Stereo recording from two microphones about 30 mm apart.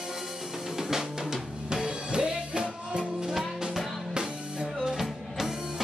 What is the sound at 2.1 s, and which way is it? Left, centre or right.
Music, right.